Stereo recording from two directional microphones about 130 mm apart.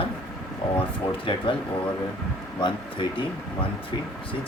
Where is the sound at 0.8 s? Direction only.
40° left (ahead or behind).